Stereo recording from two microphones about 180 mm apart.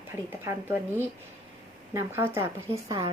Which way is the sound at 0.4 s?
10° right (ahead or behind).